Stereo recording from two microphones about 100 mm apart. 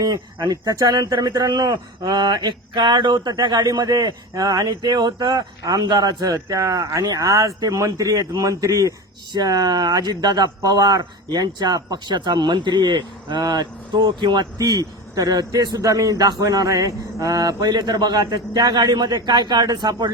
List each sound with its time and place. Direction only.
0.0 s speech: 45° right (ahead or behind)
9.3 s a man's voice: 45° right (ahead or behind)
14.6 s a man's voice: 35° right (ahead or behind)